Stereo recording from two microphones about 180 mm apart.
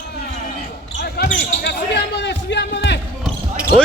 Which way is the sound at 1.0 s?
60° left (ahead or behind).